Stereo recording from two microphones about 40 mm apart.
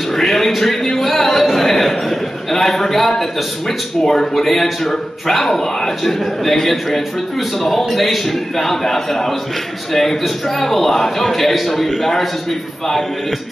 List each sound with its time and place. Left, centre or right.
0.1 s a man's voice: centre